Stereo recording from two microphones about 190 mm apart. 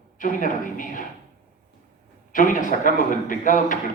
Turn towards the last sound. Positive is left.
turn(degrees=45)  # may be behind; listen again after turning